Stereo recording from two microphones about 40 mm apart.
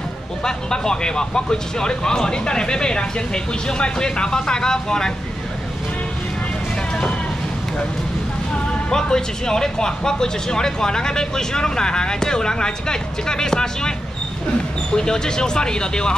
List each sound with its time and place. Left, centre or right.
0.4 s speech: centre
8.9 s speech: centre
15.0 s speech: centre